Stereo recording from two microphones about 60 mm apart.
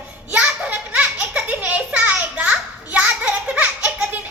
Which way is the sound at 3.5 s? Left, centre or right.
Right.